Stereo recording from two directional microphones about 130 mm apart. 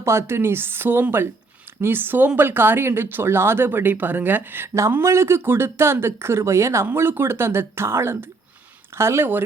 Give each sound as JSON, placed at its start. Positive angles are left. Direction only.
{"t": 0.0, "sound": "speech", "side_deg": -20}